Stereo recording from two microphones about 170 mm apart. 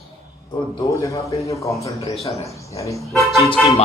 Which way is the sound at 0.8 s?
20° left (ahead or behind).